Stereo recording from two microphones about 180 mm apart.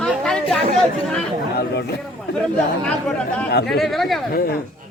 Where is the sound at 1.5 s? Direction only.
65° left (ahead or behind).